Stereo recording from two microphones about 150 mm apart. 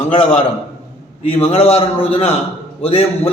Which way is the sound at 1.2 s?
40° left (ahead or behind).